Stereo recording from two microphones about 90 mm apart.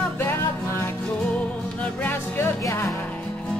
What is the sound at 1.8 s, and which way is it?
Music, 20° left (ahead or behind).